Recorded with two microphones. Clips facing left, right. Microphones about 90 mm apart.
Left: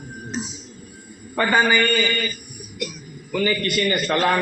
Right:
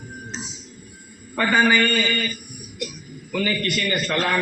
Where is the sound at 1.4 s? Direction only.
15° left (ahead or behind).